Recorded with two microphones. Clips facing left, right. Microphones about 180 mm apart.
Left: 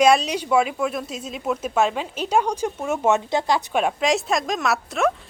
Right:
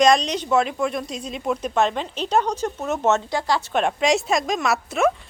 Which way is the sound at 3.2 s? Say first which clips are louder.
Left 2 dB; 20° left (ahead or behind).